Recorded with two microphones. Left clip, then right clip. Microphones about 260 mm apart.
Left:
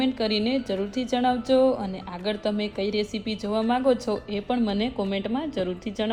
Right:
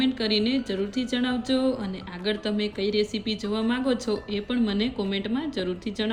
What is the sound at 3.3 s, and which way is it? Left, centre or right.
A woman's voice, centre.